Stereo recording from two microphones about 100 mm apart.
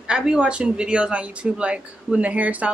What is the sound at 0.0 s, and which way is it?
Speech, 5° right (ahead or behind).